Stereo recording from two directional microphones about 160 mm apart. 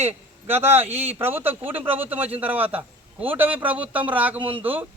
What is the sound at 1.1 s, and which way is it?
A man's voice, 15° right (ahead or behind).